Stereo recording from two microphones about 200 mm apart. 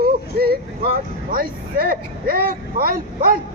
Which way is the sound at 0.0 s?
50° right (ahead or behind).